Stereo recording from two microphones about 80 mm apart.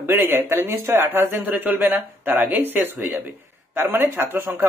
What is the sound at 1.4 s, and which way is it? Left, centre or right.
Speech, right.